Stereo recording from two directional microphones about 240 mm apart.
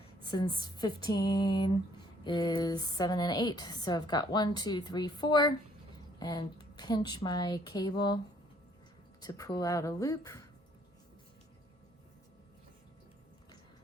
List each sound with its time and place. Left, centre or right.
0.3 s a woman's voice: centre
9.2 s a woman's voice: centre